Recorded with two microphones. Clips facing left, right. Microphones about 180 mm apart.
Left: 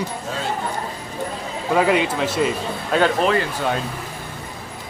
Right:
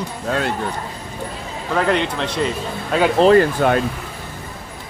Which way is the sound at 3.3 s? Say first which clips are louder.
Right 8 dB; 60° right (ahead or behind).